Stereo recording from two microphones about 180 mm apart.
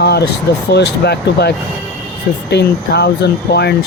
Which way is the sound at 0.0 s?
65° left (ahead or behind).